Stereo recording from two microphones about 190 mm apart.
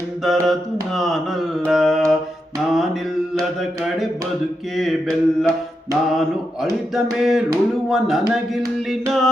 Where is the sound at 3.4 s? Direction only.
Centre (ahead or behind).